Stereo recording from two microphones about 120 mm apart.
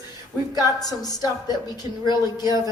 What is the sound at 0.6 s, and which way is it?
A woman's voice, 35° left (ahead or behind).